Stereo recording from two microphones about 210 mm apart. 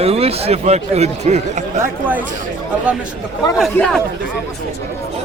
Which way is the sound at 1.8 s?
10° right (ahead or behind).